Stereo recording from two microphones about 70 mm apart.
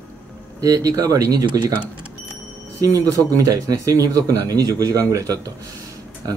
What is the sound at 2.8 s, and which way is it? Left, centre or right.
Speech, right.